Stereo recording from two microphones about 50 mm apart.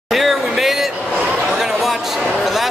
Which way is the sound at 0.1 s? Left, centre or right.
Centre.